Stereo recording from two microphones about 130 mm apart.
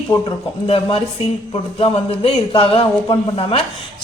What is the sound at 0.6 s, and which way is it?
Speech, 50° left (ahead or behind).